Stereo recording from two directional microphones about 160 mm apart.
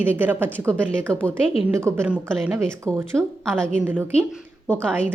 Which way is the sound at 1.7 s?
15° right (ahead or behind).